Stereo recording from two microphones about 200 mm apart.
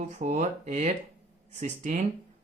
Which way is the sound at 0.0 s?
35° right (ahead or behind).